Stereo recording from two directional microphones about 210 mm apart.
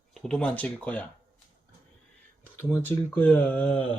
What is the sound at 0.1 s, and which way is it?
Speech, 5° left (ahead or behind).